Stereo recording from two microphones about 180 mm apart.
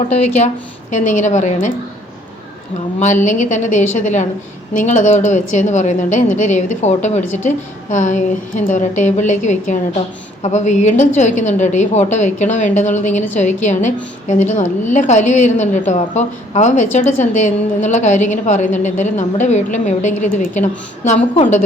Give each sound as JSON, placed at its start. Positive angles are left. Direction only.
{"t": 0.2, "sound": "a woman's voice", "side_deg": 40}
{"t": 3.0, "sound": "a woman's voice", "side_deg": 45}